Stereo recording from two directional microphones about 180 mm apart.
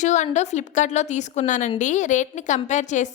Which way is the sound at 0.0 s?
40° left (ahead or behind).